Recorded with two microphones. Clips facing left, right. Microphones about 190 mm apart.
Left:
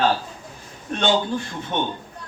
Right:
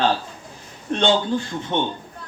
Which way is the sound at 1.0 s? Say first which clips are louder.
Right 2 dB; 25° right (ahead or behind).